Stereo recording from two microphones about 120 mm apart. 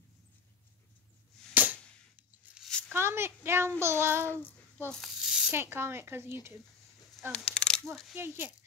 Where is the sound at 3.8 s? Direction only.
20° right (ahead or behind).